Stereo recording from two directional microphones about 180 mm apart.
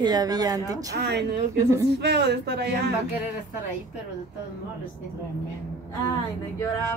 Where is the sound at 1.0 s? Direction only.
70° right (ahead or behind).